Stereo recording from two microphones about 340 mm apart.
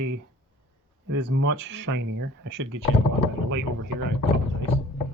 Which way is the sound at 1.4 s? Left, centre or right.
Right.